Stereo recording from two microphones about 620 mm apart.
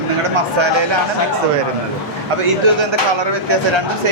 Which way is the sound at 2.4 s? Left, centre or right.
Right.